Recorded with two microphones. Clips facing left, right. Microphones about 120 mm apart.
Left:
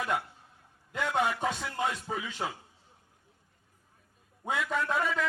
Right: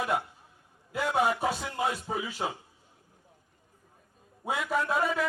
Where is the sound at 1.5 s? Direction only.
15° right (ahead or behind).